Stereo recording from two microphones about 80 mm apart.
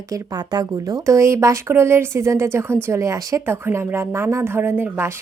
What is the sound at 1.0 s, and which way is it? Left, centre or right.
Speech, right.